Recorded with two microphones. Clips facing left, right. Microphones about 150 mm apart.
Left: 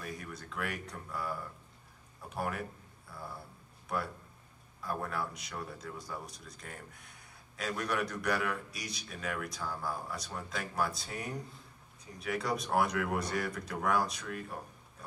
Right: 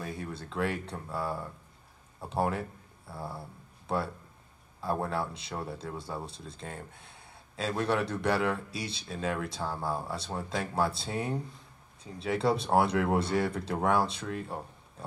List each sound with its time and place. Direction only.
0.0 s a man's voice: 30° right (ahead or behind)